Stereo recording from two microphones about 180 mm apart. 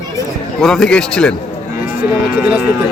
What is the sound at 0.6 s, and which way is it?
Speech, 5° left (ahead or behind).